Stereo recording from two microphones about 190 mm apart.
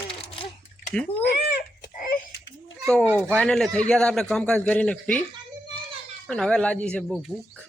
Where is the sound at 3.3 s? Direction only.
5° left (ahead or behind).